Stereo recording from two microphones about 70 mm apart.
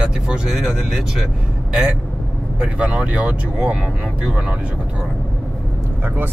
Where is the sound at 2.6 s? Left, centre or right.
Centre.